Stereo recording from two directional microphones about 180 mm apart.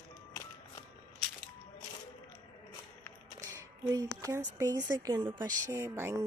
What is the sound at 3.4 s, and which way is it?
Speech, 20° right (ahead or behind).